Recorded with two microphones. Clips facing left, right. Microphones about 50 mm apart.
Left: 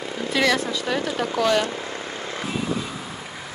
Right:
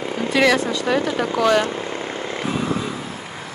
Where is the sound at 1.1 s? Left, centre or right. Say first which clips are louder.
Right 3 dB; right.